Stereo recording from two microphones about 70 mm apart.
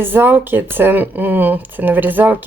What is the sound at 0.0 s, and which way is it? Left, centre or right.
Speech, right.